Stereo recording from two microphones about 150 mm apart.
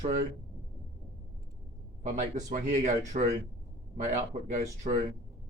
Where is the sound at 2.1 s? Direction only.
55° right (ahead or behind).